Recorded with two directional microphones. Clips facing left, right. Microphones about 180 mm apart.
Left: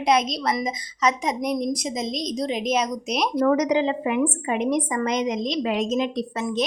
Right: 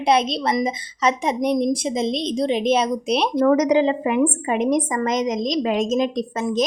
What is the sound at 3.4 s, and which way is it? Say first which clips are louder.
A woman's voice: right 4 dB; 45° right (ahead or behind).